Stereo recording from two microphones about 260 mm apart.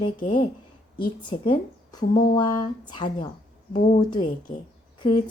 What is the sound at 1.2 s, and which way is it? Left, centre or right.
A woman's voice, centre.